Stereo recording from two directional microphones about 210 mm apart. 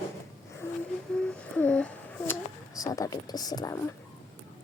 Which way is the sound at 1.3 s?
5° left (ahead or behind).